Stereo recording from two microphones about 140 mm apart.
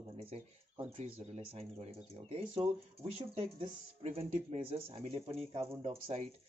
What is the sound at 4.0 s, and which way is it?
Speech, 45° right (ahead or behind).